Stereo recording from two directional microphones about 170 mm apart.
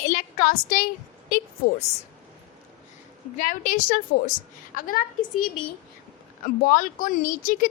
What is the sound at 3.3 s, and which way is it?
A woman's voice, 55° left (ahead or behind).